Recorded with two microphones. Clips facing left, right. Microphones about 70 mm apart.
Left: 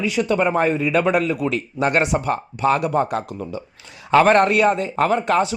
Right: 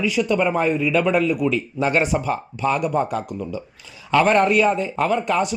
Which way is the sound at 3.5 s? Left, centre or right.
Left.